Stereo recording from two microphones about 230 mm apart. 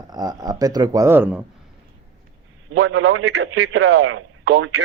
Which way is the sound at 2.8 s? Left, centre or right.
Right.